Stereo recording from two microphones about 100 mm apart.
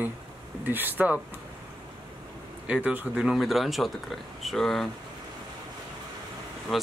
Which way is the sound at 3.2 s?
Centre (ahead or behind).